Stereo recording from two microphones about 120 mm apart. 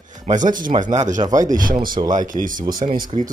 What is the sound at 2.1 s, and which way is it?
Speech, 90° right.